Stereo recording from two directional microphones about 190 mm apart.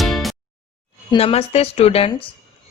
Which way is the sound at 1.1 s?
30° left (ahead or behind).